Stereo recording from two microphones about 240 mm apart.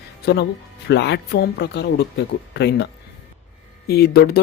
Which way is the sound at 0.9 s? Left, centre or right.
Left.